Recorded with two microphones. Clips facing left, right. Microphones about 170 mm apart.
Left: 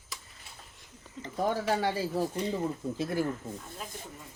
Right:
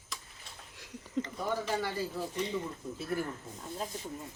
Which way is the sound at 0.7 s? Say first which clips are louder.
Right 13 dB; 90° right.